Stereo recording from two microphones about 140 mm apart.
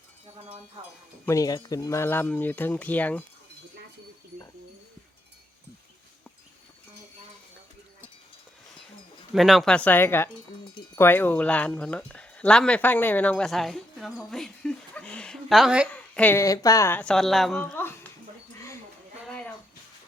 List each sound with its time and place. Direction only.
1.2 s speech: 20° left (ahead or behind)
9.3 s speech: centre (ahead or behind)
15.9 s a sound: 10° left (ahead or behind)
16.4 s speech: 25° left (ahead or behind)
17.0 s speech: 5° left (ahead or behind)
17.6 s a sound: 15° left (ahead or behind)